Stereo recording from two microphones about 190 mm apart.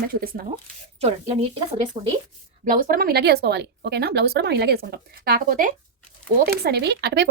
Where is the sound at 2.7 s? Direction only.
50° right (ahead or behind).